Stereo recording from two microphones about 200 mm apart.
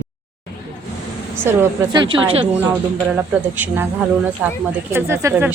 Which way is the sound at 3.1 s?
10° right (ahead or behind).